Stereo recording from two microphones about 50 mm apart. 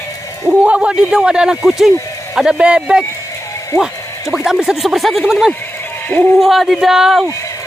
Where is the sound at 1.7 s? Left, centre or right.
Centre.